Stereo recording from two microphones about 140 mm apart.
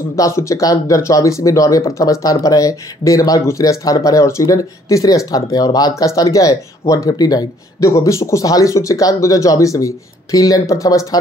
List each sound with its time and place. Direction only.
0.1 s speech: 20° left (ahead or behind)